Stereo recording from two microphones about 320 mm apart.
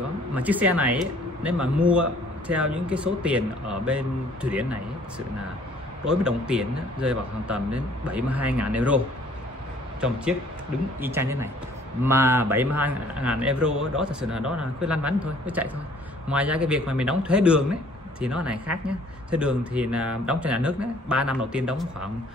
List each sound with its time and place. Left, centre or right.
0.3 s speech: centre
6.0 s a man's voice: centre